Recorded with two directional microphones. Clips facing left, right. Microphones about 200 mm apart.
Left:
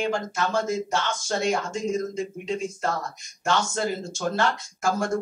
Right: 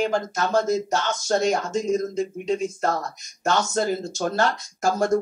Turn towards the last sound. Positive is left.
turn(degrees=-40)  # may be behind; listen again after turning